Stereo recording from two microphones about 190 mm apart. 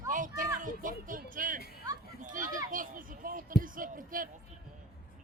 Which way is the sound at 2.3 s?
45° right (ahead or behind).